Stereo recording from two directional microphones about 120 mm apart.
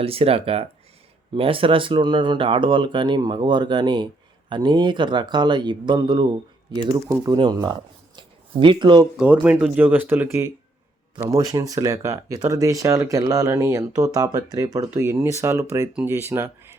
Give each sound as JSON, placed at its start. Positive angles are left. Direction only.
{"t": 0.0, "sound": "speech", "side_deg": -55}
{"t": 9.1, "sound": "speech", "side_deg": -10}